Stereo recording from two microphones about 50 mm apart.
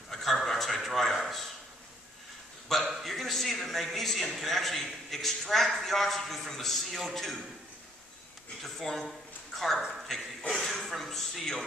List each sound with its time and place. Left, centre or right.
0.1 s a sound: centre
2.7 s a man's voice: centre
8.6 s a man's voice: centre
9.8 s a man's voice: centre
10.5 s a man's voice: centre